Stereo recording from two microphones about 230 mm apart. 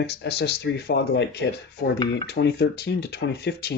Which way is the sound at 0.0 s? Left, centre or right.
Left.